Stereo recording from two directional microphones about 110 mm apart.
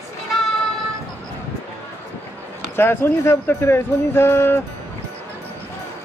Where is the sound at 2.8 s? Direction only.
20° left (ahead or behind).